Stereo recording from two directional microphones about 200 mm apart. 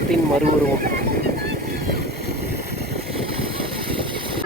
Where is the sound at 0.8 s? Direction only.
45° right (ahead or behind).